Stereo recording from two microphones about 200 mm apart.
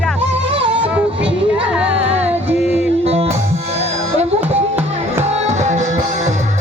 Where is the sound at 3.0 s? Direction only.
30° right (ahead or behind).